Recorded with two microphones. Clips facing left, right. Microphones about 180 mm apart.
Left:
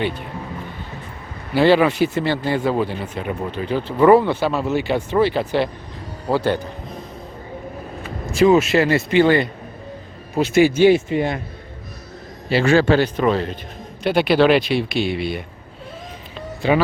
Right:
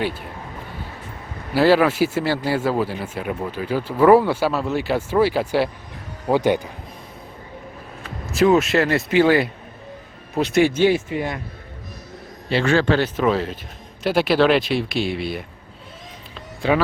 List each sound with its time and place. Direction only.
1.5 s speech: 5° right (ahead or behind)
8.3 s speech: centre (ahead or behind)
10.8 s a man's voice: 25° left (ahead or behind)
12.5 s a man's voice: 5° left (ahead or behind)
13.1 s speech: 5° right (ahead or behind)
16.6 s speech: centre (ahead or behind)